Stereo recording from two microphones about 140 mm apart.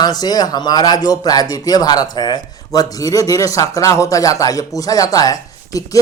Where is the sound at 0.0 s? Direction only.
30° left (ahead or behind).